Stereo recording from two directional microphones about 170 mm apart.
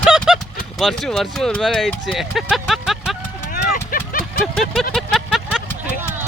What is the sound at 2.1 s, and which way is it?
Vehicle, 5° right (ahead or behind).